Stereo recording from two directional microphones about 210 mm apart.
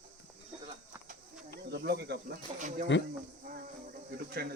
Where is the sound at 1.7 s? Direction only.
50° right (ahead or behind).